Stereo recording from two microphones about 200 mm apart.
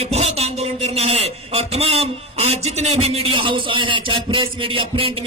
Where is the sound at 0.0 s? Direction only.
30° right (ahead or behind).